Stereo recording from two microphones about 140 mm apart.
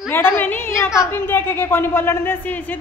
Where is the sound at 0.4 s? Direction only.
15° left (ahead or behind).